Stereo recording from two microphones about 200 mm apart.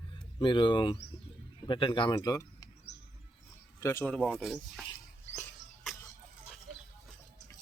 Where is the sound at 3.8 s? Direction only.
15° left (ahead or behind).